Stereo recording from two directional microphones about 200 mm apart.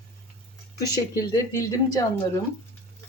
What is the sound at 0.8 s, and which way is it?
Speech, 15° left (ahead or behind).